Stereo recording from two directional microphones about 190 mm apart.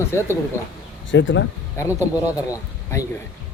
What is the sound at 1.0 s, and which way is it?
Speech, 80° left.